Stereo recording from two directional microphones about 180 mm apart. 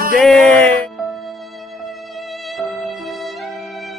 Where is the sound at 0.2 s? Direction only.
5° left (ahead or behind).